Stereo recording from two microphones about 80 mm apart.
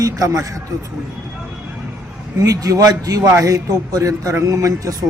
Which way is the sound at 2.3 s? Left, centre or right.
Right.